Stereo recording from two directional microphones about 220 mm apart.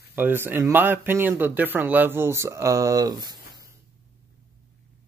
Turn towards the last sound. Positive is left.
turn(degrees=-20)  # may be behind; listen again after turning